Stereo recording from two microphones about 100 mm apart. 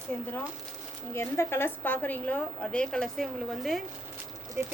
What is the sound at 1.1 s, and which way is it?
A woman's voice, 25° left (ahead or behind).